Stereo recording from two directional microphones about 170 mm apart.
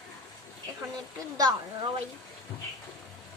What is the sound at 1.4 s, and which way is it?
Speech, 25° right (ahead or behind).